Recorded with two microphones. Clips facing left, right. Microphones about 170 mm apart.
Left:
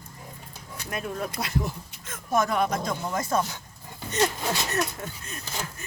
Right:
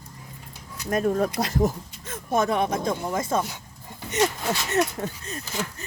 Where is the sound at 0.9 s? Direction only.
40° right (ahead or behind).